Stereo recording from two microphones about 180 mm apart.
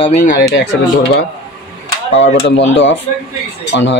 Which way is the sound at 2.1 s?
90° left.